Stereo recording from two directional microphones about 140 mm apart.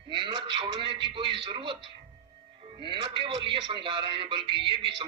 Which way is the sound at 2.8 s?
35° right (ahead or behind).